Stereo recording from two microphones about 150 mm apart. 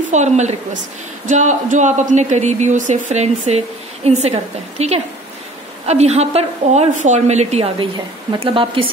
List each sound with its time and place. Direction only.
0.1 s speech: 50° right (ahead or behind)